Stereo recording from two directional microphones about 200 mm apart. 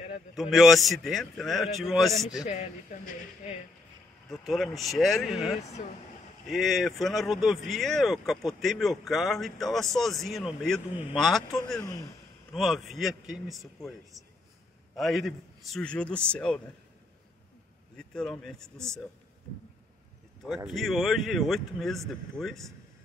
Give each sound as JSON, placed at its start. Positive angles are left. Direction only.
{"t": 0.4, "sound": "speech", "side_deg": 0}
{"t": 4.3, "sound": "speech", "side_deg": 0}
{"t": 11.8, "sound": "speech", "side_deg": 15}
{"t": 12.5, "sound": "speech", "side_deg": 0}
{"t": 17.9, "sound": "speech", "side_deg": 5}
{"t": 20.4, "sound": "speech", "side_deg": 0}